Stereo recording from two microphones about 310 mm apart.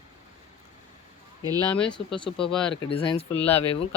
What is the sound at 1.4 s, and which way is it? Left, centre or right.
Speech, centre.